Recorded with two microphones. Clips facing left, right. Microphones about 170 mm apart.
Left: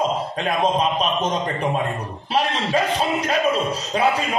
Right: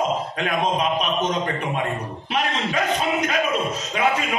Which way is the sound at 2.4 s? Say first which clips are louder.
Left 3 dB; 30° left (ahead or behind).